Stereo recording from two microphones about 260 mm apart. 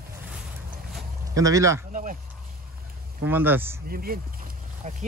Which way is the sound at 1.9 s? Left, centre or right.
Right.